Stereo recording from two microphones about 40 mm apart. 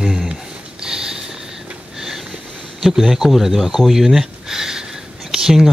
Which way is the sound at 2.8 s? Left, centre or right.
Centre.